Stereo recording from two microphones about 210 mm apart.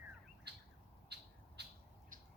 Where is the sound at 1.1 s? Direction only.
50° right (ahead or behind).